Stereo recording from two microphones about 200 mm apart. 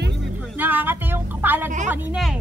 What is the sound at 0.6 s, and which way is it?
Speech, 10° right (ahead or behind).